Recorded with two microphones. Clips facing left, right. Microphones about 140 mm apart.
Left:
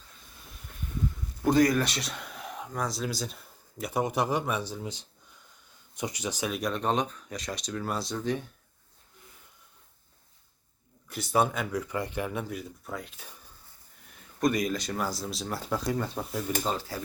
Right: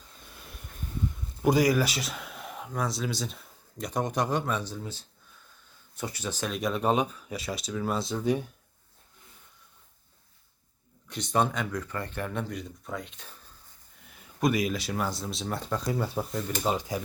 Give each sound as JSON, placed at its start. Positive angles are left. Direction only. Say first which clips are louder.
{"t": 1.5, "sound": "speech", "louder": "even", "side_deg": -5}
{"t": 6.6, "sound": "speech", "louder": "right 4 dB", "side_deg": -5}
{"t": 11.1, "sound": "speech", "louder": "left 1 dB", "side_deg": 5}
{"t": 14.4, "sound": "speech", "louder": "even", "side_deg": -5}
{"t": 16.6, "sound": "speech", "louder": "right 3 dB", "side_deg": -15}